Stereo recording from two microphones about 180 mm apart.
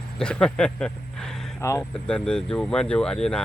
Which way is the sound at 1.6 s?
15° left (ahead or behind).